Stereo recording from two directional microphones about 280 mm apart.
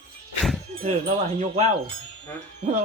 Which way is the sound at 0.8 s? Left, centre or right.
Right.